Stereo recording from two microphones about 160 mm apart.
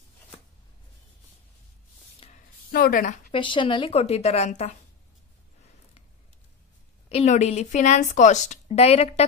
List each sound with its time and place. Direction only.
2.2 s a sound: 35° left (ahead or behind)
2.7 s a woman's voice: 65° left (ahead or behind)
3.3 s a woman's voice: 30° left (ahead or behind)
7.1 s a woman's voice: 40° left (ahead or behind)